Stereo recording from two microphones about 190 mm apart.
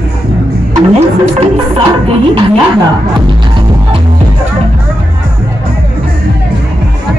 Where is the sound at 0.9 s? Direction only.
30° right (ahead or behind).